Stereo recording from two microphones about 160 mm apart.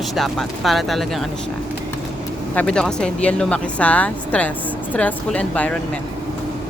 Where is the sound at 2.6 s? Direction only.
5° left (ahead or behind).